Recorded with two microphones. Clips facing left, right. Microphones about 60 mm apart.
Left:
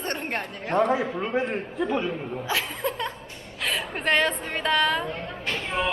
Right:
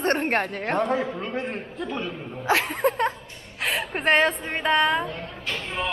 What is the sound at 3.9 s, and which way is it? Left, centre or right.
Speech, right.